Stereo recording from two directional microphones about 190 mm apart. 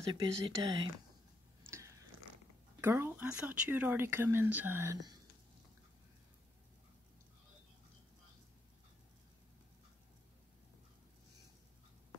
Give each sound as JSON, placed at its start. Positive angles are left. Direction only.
{"t": 0.1, "sound": "speech", "side_deg": -20}
{"t": 2.8, "sound": "speech", "side_deg": -10}